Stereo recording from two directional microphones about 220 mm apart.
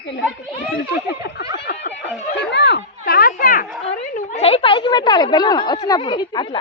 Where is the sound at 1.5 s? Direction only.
50° left (ahead or behind); by 5.8 s 20° left (ahead or behind).